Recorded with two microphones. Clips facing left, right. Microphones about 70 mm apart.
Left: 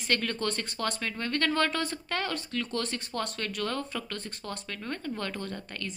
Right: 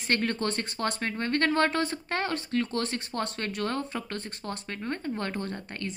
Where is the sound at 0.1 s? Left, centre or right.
Right.